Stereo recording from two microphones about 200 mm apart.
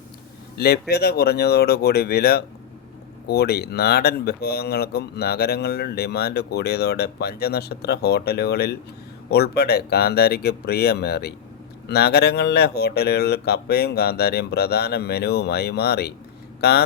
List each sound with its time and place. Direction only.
0.5 s speech: 55° left (ahead or behind)